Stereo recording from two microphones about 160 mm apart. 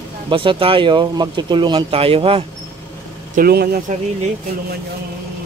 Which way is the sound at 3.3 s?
70° right (ahead or behind).